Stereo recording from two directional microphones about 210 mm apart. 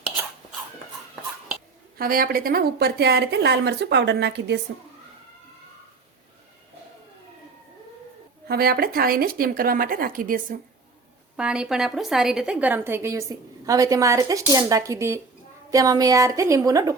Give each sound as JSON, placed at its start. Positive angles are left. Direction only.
{"t": 2.0, "sound": "a woman's voice", "side_deg": -45}
{"t": 8.4, "sound": "a woman's voice", "side_deg": -45}
{"t": 11.3, "sound": "a woman's voice", "side_deg": -5}